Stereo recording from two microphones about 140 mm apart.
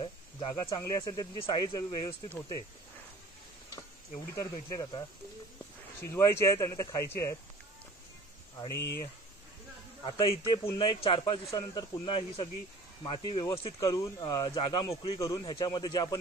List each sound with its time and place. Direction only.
0.0 s speech: 40° left (ahead or behind)
4.4 s speech: 30° left (ahead or behind)
6.0 s speech: 20° left (ahead or behind)
8.6 s speech: 20° left (ahead or behind)
10.0 s speech: 40° left (ahead or behind)
13.7 s speech: 25° left (ahead or behind)